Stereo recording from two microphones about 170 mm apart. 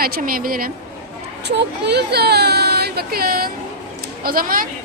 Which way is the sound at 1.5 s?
80° right.